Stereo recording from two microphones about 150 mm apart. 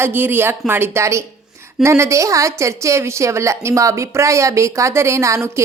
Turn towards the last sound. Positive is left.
turn(degrees=-20)  # may be behind; listen again after turning